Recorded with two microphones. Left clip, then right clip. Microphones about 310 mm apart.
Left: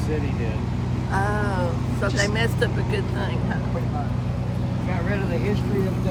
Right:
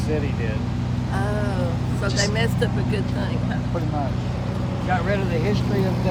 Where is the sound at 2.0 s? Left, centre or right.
Centre.